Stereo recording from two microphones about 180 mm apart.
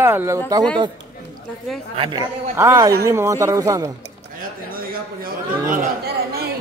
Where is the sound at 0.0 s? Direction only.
10° right (ahead or behind).